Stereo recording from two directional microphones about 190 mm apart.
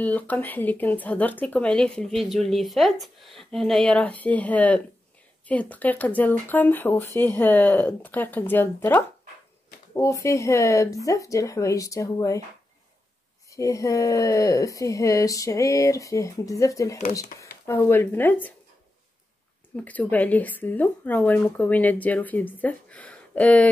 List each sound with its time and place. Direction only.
0.0 s speech: 10° left (ahead or behind)
13.5 s speech: 15° left (ahead or behind)
19.8 s speech: 10° left (ahead or behind)